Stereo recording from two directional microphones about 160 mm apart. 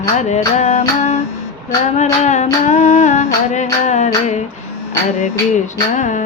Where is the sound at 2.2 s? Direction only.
45° left (ahead or behind).